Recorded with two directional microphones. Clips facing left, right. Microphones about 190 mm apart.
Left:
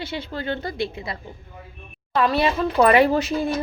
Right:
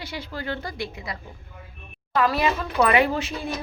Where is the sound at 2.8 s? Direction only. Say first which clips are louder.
Left 4 dB; 40° left (ahead or behind).